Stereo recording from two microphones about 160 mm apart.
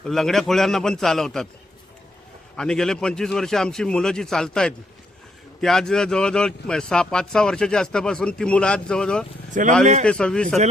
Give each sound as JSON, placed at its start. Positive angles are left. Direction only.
{"t": 0.0, "sound": "speech", "side_deg": 0}
{"t": 2.6, "sound": "speech", "side_deg": 5}
{"t": 9.8, "sound": "a man's voice", "side_deg": -50}
{"t": 10.1, "sound": "speech", "side_deg": 5}